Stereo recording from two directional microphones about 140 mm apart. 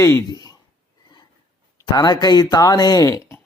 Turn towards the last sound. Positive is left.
turn(degrees=20)  # may be behind; listen again after turning